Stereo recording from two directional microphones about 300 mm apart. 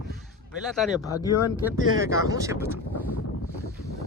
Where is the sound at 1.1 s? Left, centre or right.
Left.